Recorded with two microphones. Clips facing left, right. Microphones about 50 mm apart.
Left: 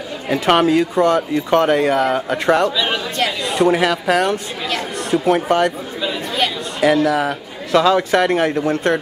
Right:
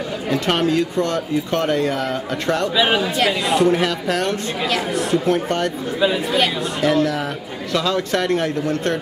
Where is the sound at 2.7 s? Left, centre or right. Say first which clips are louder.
Right 3 dB; centre.